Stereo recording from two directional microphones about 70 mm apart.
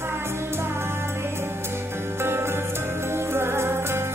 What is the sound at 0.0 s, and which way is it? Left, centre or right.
Music, right.